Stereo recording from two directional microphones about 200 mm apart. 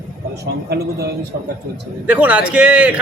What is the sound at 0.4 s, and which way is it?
Speech, 55° right (ahead or behind).